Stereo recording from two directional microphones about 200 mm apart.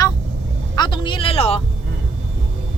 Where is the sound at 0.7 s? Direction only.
20° left (ahead or behind).